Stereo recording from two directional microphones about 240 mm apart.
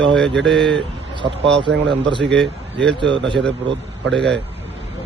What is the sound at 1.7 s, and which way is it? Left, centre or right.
Speech, right.